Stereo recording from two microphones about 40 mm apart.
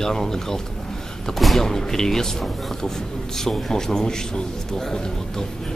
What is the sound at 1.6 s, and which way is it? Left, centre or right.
A man's voice, centre.